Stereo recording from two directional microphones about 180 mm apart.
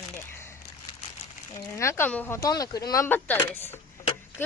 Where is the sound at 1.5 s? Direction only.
15° left (ahead or behind).